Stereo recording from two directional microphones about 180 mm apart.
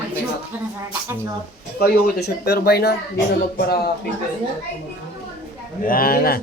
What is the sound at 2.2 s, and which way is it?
Speech, 60° left (ahead or behind).